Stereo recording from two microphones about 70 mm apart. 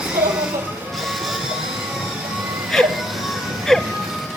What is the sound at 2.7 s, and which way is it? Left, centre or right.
Music, centre.